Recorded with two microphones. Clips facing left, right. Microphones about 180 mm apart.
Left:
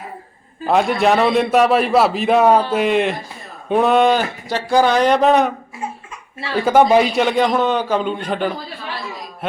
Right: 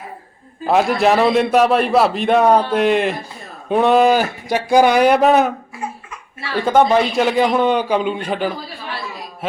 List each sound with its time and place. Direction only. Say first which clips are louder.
0.6 s a man's voice: right 1 dB; centre (ahead or behind)
6.7 s a man's voice: left 1 dB; 10° left (ahead or behind)
7.2 s speech: right 1 dB; 5° right (ahead or behind)